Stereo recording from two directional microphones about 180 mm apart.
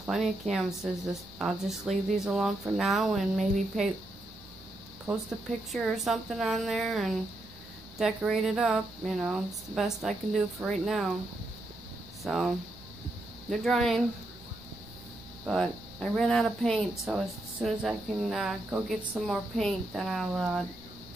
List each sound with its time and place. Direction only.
0.0 s speech: centre (ahead or behind)
5.7 s speech: centre (ahead or behind)
12.2 s speech: centre (ahead or behind)
15.4 s speech: 5° left (ahead or behind)